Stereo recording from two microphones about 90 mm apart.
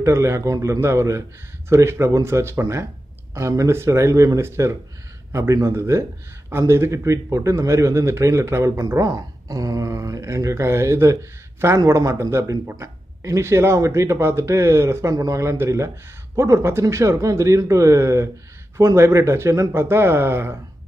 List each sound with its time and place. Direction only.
0.0 s speech: 30° right (ahead or behind)